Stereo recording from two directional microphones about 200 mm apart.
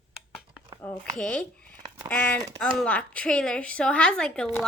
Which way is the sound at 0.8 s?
5° left (ahead or behind).